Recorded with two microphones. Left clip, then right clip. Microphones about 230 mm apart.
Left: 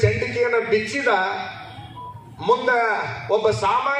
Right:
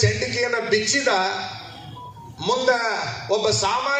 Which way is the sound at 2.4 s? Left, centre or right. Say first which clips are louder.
Left 2 dB; right.